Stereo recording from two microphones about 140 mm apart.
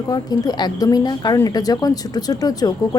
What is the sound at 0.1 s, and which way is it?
Speech, 30° left (ahead or behind).